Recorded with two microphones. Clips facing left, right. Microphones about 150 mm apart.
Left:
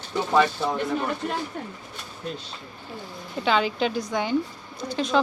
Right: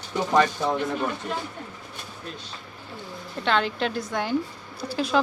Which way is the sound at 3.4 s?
5° left (ahead or behind).